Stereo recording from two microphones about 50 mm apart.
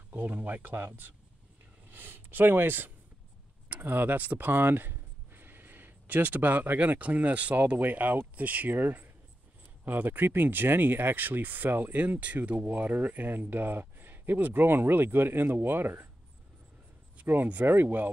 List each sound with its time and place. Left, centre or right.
0.1 s speech: right
17.6 s speech: right